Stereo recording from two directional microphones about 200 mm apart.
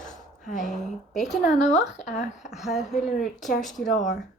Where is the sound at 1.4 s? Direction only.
35° left (ahead or behind).